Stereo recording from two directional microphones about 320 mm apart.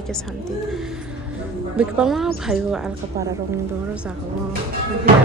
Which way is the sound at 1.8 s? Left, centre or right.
Centre.